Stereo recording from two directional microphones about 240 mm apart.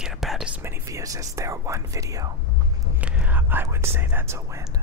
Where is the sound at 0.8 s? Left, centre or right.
Centre.